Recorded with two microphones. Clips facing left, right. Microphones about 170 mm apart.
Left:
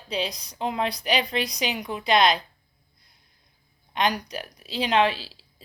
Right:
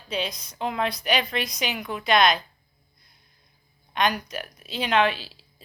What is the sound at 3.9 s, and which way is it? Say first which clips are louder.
A woman's voice: even; 30° left (ahead or behind).